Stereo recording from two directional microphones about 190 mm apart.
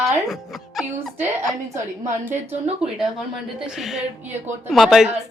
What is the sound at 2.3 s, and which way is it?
Speech, 35° right (ahead or behind).